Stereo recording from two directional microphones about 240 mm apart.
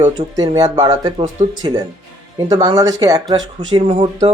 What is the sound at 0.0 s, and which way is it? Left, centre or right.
Speech, centre.